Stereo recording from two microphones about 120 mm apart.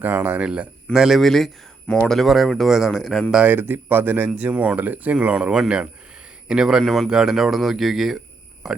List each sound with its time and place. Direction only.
0.0 s a man's voice: 15° right (ahead or behind); by 3.2 s centre (ahead or behind)
3.3 s a man's voice: 15° right (ahead or behind)